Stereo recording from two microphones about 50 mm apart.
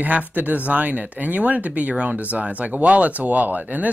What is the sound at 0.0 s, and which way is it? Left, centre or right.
Speech, right.